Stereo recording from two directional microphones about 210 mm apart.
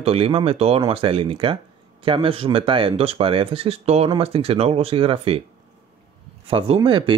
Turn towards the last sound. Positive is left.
turn(degrees=-25)  # may be behind; listen again after turning